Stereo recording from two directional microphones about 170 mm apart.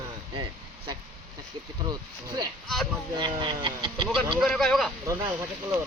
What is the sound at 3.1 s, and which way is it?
Speech, 25° right (ahead or behind).